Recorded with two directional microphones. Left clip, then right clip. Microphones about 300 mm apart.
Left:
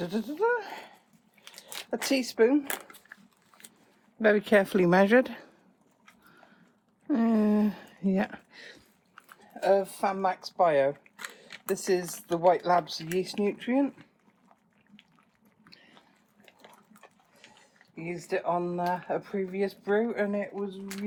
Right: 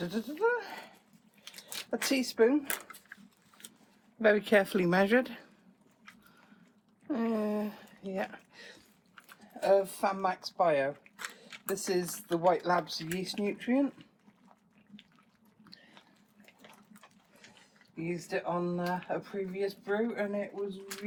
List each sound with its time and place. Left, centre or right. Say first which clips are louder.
0.0 s a sound: left 3 dB; left
1.5 s speech: left 2 dB; left
3.6 s a sound: right 1 dB; left
4.2 s speech: left 3 dB; left
7.1 s speech: left 6 dB; left
18.3 s speech: left 6 dB; left